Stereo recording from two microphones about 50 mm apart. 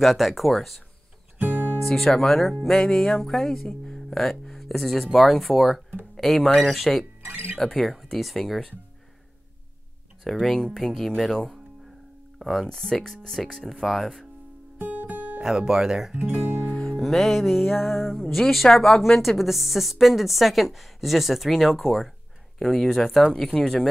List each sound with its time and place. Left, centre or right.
0.0 s speech: centre
1.4 s music: right
1.8 s speech: centre
7.2 s music: right
7.5 s speech: centre
10.2 s speech: centre
14.8 s music: right
15.4 s speech: centre
16.2 s speech: right
16.7 s music: centre
17.0 s speech: centre